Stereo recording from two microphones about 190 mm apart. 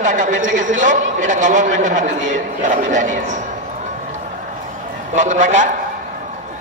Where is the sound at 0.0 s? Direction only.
40° right (ahead or behind).